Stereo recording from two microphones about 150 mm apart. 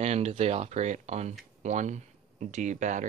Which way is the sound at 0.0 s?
50° right (ahead or behind).